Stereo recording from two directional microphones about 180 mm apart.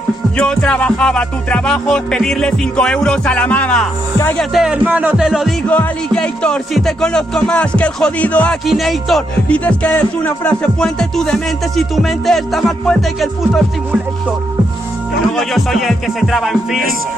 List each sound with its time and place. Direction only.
0.4 s music: 5° left (ahead or behind)
4.2 s speech: 10° left (ahead or behind)
4.6 s music: 5° right (ahead or behind)
15.3 s music: centre (ahead or behind)